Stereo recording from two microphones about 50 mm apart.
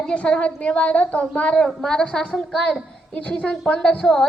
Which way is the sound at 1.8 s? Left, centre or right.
Centre.